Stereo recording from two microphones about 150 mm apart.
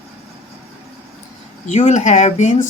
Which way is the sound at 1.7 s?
50° left (ahead or behind).